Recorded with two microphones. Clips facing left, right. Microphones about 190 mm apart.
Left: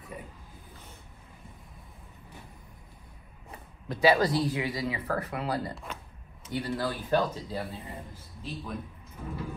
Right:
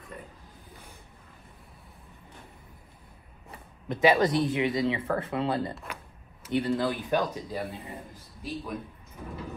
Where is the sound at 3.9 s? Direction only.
20° right (ahead or behind).